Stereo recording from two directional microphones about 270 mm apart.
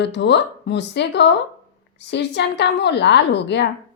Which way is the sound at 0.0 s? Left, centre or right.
Left.